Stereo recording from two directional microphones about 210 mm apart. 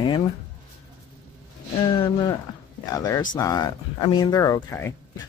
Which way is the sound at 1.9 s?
25° left (ahead or behind).